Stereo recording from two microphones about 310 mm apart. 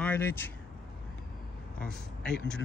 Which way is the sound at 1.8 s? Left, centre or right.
Centre.